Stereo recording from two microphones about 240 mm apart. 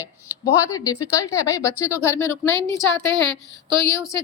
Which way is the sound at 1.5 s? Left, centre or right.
Centre.